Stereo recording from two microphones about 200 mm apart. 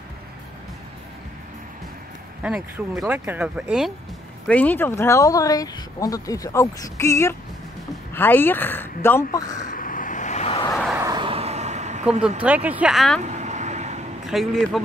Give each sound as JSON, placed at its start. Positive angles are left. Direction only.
{"t": 2.4, "sound": "speech", "side_deg": -5}
{"t": 4.5, "sound": "speech", "side_deg": 10}
{"t": 9.7, "sound": "vehicle", "side_deg": 45}
{"t": 11.0, "sound": "a sound", "side_deg": -20}
{"t": 12.4, "sound": "speech", "side_deg": -5}
{"t": 13.2, "sound": "vehicle", "side_deg": -35}
{"t": 14.2, "sound": "speech", "side_deg": 0}